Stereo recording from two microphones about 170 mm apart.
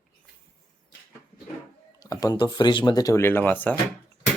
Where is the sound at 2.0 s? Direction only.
20° left (ahead or behind).